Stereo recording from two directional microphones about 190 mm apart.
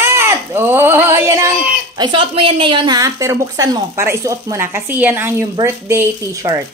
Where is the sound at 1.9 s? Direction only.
25° right (ahead or behind).